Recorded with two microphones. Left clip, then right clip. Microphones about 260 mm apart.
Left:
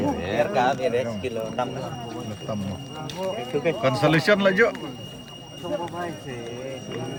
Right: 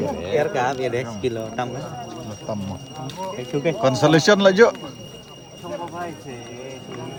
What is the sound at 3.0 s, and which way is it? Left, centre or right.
Speech, centre.